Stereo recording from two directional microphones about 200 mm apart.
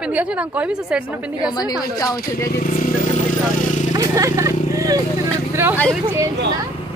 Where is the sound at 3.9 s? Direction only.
15° right (ahead or behind).